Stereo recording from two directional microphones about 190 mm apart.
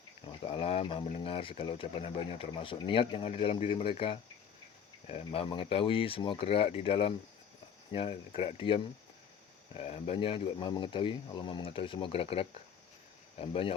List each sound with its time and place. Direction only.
0.3 s speech: 30° left (ahead or behind)